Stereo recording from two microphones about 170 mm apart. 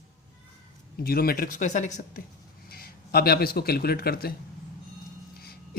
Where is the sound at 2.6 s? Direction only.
65° left (ahead or behind).